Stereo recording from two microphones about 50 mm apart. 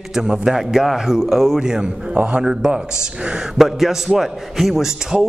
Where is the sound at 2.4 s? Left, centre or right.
Centre.